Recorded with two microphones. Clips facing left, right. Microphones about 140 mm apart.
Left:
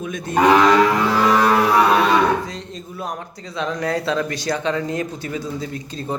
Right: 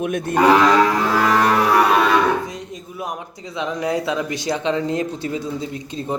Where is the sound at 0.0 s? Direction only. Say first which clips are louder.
Right 5 dB; 60° right (ahead or behind).